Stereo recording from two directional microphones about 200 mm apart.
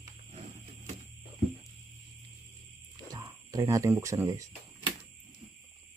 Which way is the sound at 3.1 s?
15° right (ahead or behind).